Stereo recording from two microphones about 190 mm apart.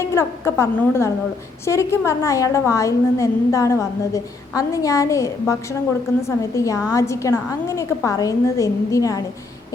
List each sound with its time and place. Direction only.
0.0 s a woman's voice: 15° left (ahead or behind)